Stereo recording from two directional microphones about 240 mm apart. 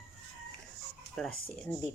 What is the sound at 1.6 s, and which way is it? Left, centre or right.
Speech, centre.